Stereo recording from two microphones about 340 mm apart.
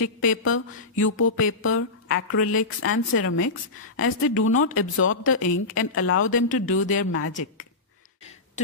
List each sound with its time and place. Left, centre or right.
0.3 s speech: left